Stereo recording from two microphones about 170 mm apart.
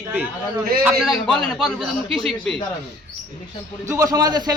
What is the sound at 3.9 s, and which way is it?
Speech, 20° right (ahead or behind).